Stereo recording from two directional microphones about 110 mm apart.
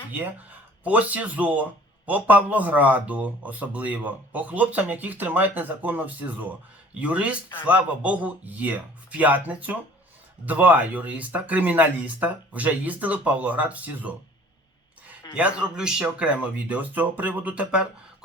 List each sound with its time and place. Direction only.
0.1 s speech: 15° right (ahead or behind)
15.4 s speech: 10° right (ahead or behind)